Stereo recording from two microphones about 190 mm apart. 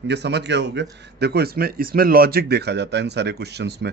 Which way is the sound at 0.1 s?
65° right (ahead or behind).